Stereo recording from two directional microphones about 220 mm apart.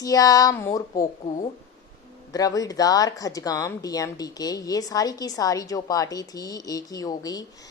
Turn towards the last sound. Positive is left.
turn(degrees=15)  # may be behind; listen again after turning